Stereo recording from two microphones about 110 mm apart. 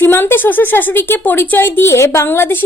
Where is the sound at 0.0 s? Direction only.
20° left (ahead or behind).